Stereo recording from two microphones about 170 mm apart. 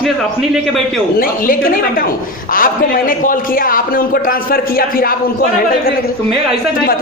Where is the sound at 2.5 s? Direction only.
55° left (ahead or behind).